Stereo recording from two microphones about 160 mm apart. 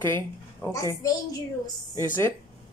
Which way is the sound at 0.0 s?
15° left (ahead or behind).